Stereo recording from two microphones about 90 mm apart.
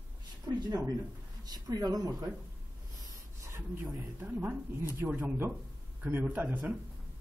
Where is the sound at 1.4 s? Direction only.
45° right (ahead or behind).